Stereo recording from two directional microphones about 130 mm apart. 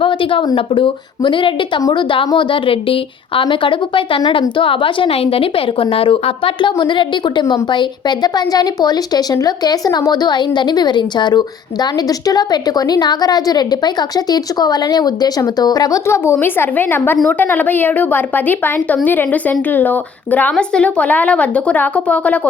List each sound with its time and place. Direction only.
0.0 s a woman's voice: 40° left (ahead or behind); by 22.4 s 10° left (ahead or behind)